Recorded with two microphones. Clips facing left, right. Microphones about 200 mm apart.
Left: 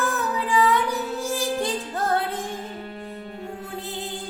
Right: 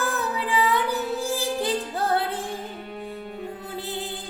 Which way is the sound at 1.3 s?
Centre (ahead or behind).